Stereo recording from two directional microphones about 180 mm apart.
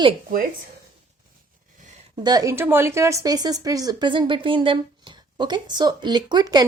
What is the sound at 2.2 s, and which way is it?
Speech, 20° right (ahead or behind).